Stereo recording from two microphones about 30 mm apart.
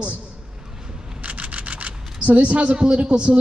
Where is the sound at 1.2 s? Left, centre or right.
Right.